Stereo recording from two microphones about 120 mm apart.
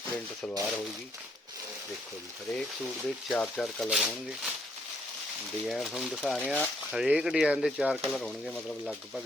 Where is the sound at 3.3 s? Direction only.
5° left (ahead or behind).